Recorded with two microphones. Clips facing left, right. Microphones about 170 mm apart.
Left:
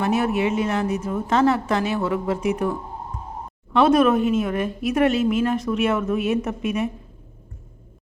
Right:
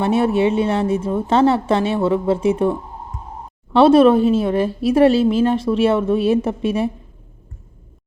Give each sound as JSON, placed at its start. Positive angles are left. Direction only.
{"t": 0.0, "sound": "a woman's voice", "side_deg": -30}